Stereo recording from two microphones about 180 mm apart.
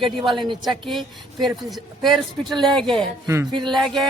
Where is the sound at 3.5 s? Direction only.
25° right (ahead or behind).